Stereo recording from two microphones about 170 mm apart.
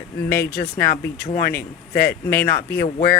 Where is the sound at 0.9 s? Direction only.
55° left (ahead or behind).